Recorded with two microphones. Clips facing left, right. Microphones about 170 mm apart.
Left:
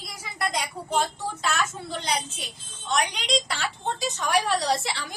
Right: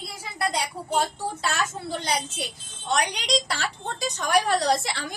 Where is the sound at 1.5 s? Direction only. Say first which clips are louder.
Even; 40° right (ahead or behind).